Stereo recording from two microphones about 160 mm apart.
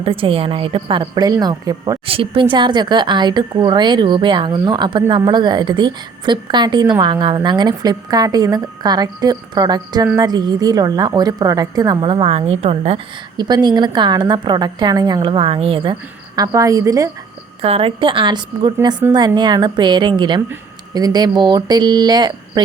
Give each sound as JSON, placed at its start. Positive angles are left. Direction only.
{"t": 0.0, "sound": "a woman's voice", "side_deg": -35}
{"t": 2.0, "sound": "speech", "side_deg": -35}
{"t": 13.3, "sound": "speech", "side_deg": -25}
{"t": 17.6, "sound": "a woman's voice", "side_deg": -35}